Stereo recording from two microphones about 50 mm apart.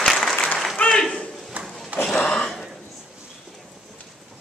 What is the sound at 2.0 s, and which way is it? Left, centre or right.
Gasp, centre.